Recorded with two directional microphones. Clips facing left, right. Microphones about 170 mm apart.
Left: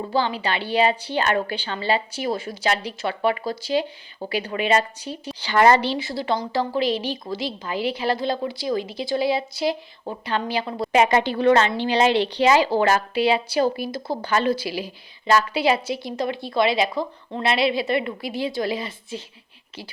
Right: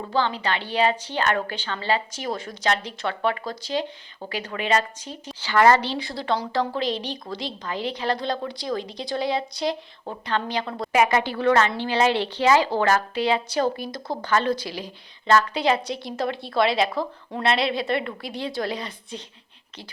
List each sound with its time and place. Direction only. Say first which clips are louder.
0.1 s a woman's voice: even; 10° left (ahead or behind)
10.9 s a woman's voice: left 2 dB; 25° left (ahead or behind); by 19.2 s 5° left (ahead or behind)